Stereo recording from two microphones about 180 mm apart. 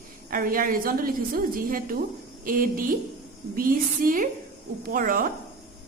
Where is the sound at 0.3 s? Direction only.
50° right (ahead or behind).